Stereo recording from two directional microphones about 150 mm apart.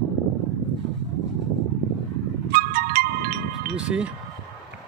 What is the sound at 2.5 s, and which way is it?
Music, 80° right.